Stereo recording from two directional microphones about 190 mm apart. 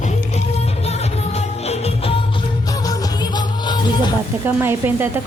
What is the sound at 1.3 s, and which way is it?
Music, 35° left (ahead or behind).